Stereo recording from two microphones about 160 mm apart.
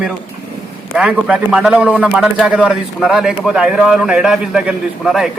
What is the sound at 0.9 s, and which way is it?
A man's voice, 5° right (ahead or behind).